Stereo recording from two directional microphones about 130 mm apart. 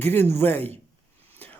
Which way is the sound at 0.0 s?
15° left (ahead or behind).